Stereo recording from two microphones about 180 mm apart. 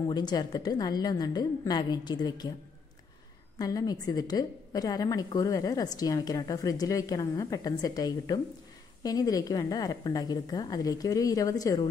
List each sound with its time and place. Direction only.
0.1 s a woman's voice: 25° left (ahead or behind)
3.5 s a woman's voice: 20° left (ahead or behind)